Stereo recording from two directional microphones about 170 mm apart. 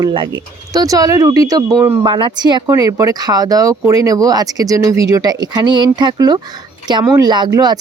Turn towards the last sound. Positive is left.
turn(degrees=-20)  # may be behind; listen again after turning